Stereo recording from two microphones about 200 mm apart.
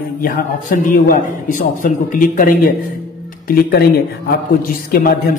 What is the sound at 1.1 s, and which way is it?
A man's voice, 40° left (ahead or behind).